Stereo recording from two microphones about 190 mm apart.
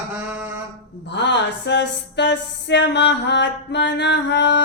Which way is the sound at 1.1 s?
65° left (ahead or behind).